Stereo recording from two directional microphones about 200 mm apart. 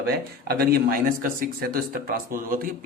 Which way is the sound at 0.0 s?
50° right (ahead or behind).